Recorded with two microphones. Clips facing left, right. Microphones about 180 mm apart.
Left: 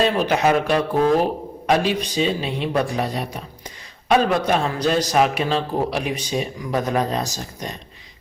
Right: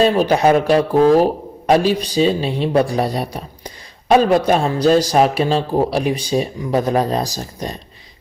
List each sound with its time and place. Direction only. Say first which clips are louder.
0.3 s a man's voice: right 5 dB; 35° right (ahead or behind)